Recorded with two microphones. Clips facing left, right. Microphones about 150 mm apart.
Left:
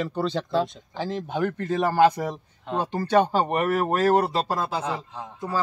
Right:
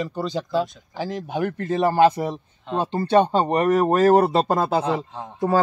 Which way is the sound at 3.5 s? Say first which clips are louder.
Right 5 dB; 35° right (ahead or behind).